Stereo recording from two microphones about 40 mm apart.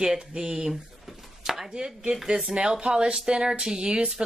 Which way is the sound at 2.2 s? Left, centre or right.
Centre.